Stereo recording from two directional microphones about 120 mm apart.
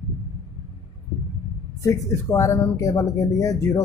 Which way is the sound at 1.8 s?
25° left (ahead or behind).